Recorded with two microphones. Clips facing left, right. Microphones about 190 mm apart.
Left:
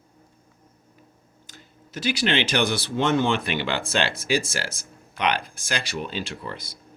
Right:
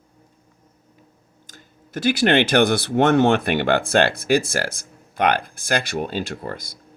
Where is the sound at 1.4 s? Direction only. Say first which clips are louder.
Right 1 dB; 50° right (ahead or behind).